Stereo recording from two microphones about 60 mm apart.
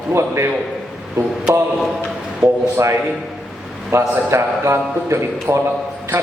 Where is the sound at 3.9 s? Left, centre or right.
Right.